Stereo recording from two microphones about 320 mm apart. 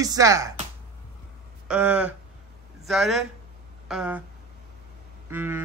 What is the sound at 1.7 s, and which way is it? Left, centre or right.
Speech, centre.